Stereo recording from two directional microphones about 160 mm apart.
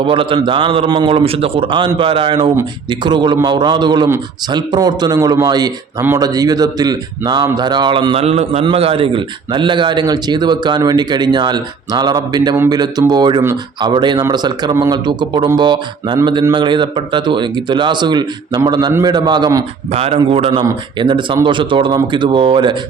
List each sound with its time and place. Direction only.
0.0 s a man's voice: 35° right (ahead or behind)
19.9 s a man's voice: 40° right (ahead or behind)